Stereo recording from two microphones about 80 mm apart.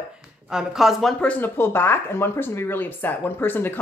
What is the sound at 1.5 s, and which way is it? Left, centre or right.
Speech, left.